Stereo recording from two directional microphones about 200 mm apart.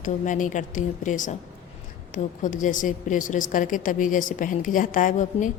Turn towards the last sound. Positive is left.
turn(degrees=40)  # may be behind; listen again after turning